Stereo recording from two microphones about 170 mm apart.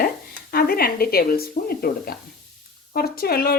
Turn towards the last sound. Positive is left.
turn(degrees=60)  # may be behind; listen again after turning